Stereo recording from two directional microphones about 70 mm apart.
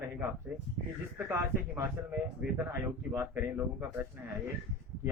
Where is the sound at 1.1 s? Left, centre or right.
Right.